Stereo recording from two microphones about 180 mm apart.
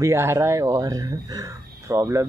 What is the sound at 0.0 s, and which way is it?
Speech, 15° right (ahead or behind).